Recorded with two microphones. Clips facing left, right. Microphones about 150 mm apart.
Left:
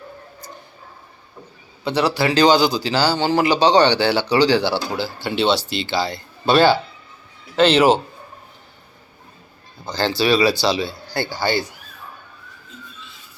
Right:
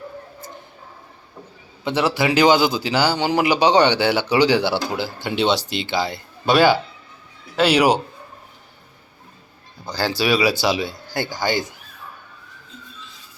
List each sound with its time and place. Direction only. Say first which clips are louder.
2.1 s a man's voice: even; 15° right (ahead or behind)
9.8 s speech: left 2 dB; 10° right (ahead or behind)